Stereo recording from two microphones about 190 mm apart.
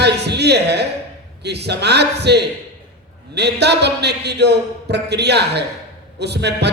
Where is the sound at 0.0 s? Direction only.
60° right (ahead or behind).